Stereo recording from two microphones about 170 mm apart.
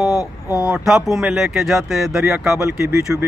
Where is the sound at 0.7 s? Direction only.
5° right (ahead or behind).